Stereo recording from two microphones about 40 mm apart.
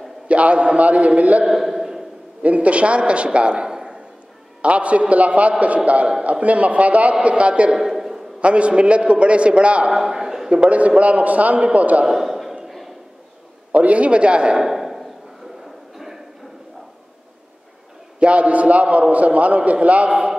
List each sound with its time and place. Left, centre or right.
0.3 s a man's voice: right
1.4 s speech: centre
2.4 s a man's voice: right
4.6 s a man's voice: right
7.7 s a sound: centre
8.4 s a man's voice: right
9.9 s a sound: centre
10.5 s a man's voice: right
12.1 s a sound: centre
13.7 s a man's voice: right
14.6 s a sound: centre
18.2 s a man's voice: right